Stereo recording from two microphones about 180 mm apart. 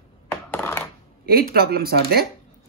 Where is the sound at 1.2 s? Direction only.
55° right (ahead or behind).